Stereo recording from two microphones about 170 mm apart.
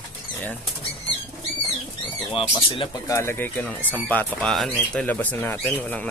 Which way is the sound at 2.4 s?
30° left (ahead or behind).